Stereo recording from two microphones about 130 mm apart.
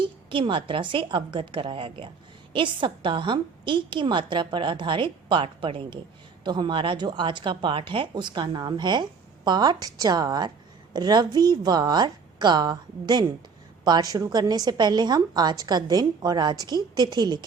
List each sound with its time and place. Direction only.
0.3 s speech: 40° right (ahead or behind)